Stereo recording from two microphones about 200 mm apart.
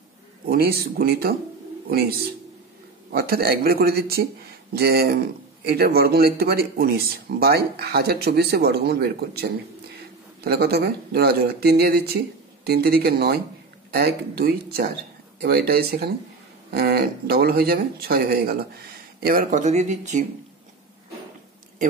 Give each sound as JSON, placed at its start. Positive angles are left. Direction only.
{"t": 0.5, "sound": "speech", "side_deg": -50}